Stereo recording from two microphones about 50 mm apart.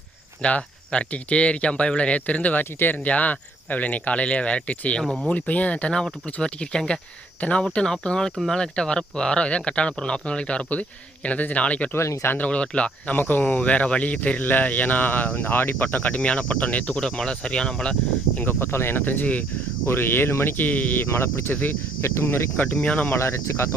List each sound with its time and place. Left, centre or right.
0.4 s speech: left
5.0 s speech: centre
5.3 s speech: left
6.0 s speech: centre
13.1 s speech: left
13.5 s speech: left
18.4 s speech: left
19.9 s speech: left
20.7 s speech: left
21.1 s speech: left
21.5 s speech: left
22.0 s speech: left
22.6 s speech: left
23.1 s speech: left